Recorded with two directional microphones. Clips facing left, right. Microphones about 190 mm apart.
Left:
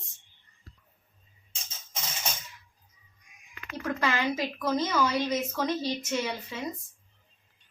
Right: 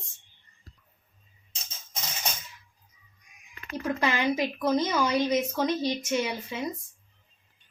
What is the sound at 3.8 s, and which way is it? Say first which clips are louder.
A woman's voice: right 2 dB; 20° right (ahead or behind).